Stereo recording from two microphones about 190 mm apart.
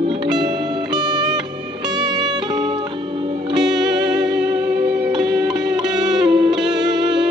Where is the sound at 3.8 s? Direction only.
20° right (ahead or behind).